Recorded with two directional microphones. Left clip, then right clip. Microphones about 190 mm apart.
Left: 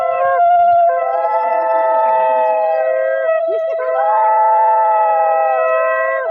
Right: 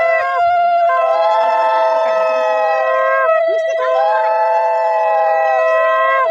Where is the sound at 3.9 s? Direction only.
10° right (ahead or behind).